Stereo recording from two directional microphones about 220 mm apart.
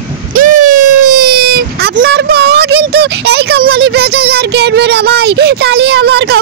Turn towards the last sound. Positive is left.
turn(degrees=-45)  # may be behind; listen again after turning